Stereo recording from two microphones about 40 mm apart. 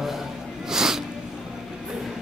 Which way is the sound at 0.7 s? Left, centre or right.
Centre.